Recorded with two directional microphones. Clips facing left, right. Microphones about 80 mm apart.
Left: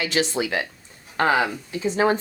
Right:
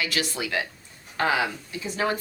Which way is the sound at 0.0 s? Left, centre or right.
Left.